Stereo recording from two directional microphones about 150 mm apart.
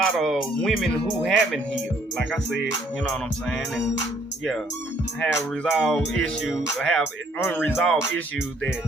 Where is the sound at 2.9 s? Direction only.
5° left (ahead or behind).